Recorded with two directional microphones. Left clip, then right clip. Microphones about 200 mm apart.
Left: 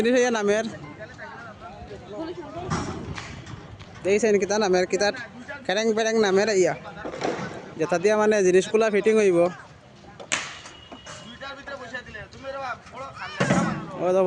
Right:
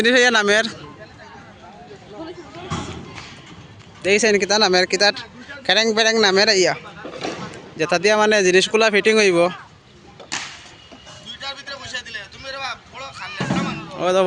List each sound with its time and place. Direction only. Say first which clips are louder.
0.0 s speech: right 6 dB; 5° left (ahead or behind)
4.0 s speech: right 4 dB; 5° right (ahead or behind)
7.8 s speech: right 5 dB; 5° left (ahead or behind)
11.3 s vehicle: right 6 dB; 40° left (ahead or behind)
13.5 s music: even; 25° left (ahead or behind)
14.0 s speech: right 4 dB; centre (ahead or behind)